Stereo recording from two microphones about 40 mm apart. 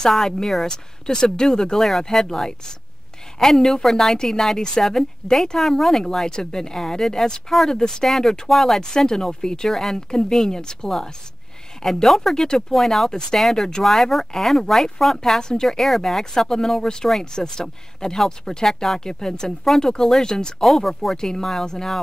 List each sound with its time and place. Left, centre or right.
0.1 s speech: centre
6.1 s speech: centre
9.7 s speech: centre
15.4 s speech: centre
20.6 s speech: centre
21.2 s speech: centre